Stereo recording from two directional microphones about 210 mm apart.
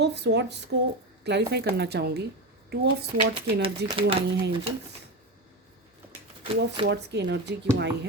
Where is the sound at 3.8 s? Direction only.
55° right (ahead or behind).